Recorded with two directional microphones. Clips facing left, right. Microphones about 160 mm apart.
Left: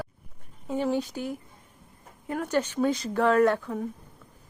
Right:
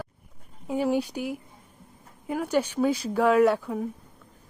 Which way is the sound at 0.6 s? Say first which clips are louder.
Right 2 dB; 10° right (ahead or behind).